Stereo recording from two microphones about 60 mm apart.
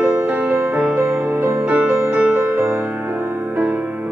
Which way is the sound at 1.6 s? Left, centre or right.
Right.